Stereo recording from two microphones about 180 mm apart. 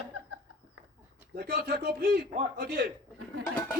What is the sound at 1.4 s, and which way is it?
A man's voice, 65° right (ahead or behind).